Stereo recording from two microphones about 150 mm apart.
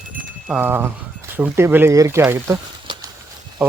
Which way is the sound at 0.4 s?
10° right (ahead or behind).